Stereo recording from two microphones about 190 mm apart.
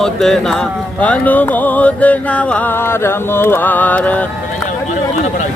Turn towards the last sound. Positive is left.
turn(degrees=10)  # may be behind; listen again after turning